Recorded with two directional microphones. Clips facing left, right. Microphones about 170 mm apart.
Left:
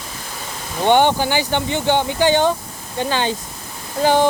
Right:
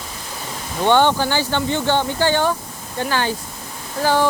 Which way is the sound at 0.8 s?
15° left (ahead or behind).